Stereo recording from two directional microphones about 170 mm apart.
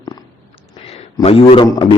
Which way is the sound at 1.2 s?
35° left (ahead or behind).